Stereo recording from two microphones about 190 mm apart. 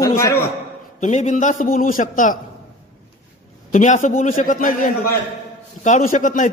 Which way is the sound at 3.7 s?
40° left (ahead or behind).